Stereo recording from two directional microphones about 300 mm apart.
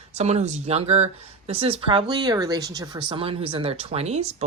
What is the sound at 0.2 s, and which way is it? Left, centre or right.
Speech, right.